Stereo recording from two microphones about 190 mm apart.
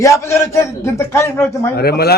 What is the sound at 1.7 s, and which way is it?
Speech, 55° left (ahead or behind).